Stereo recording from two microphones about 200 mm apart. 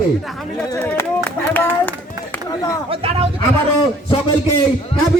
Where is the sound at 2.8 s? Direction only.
30° right (ahead or behind).